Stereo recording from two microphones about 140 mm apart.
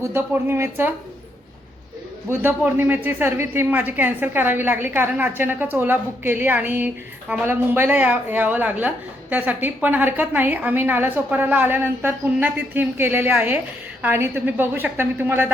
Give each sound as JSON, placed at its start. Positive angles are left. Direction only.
{"t": 0.0, "sound": "speech", "side_deg": -15}
{"t": 2.3, "sound": "speech", "side_deg": -15}